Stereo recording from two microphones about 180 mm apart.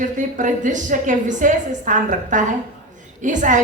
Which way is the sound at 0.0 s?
45° right (ahead or behind).